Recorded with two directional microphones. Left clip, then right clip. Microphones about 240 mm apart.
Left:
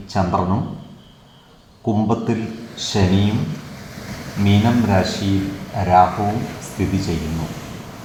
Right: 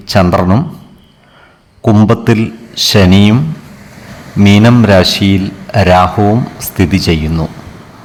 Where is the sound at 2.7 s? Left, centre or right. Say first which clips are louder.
Right 12 dB; right.